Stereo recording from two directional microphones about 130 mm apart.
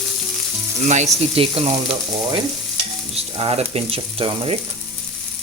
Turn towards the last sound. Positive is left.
turn(degrees=-45)  # may be behind; listen again after turning